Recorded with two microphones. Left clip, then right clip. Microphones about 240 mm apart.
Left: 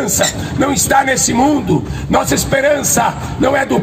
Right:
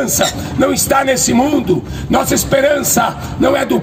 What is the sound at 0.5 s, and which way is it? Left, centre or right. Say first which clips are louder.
Speech: left 1 dB; centre.